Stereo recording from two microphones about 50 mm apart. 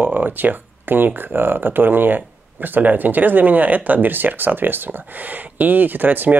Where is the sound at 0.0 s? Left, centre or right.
Right.